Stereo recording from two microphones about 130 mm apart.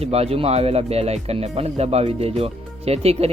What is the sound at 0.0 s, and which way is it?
Speech, 50° right (ahead or behind).